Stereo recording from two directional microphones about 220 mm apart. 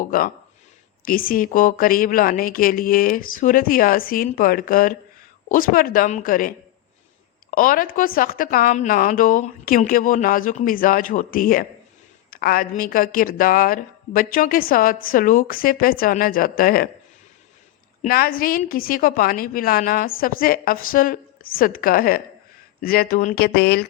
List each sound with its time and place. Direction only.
0.0 s a sound: 40° left (ahead or behind)
1.0 s a woman's voice: 40° left (ahead or behind)
7.5 s a woman's voice: 40° left (ahead or behind)
18.0 s a woman's voice: 40° left (ahead or behind)